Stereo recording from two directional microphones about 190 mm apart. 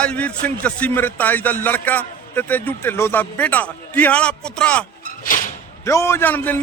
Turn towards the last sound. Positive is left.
turn(degrees=10)  # may be behind; listen again after turning